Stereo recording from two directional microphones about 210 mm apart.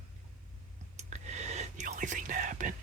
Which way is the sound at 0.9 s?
35° right (ahead or behind).